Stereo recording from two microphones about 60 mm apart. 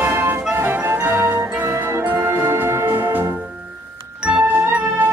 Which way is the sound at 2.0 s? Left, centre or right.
Right.